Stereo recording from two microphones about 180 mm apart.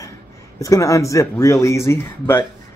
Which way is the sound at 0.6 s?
20° left (ahead or behind).